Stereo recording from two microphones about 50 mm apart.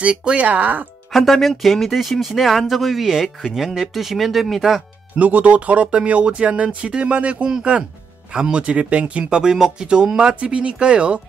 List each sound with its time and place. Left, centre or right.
0.0 s speech: right
1.1 s speech: centre
5.1 s speech: right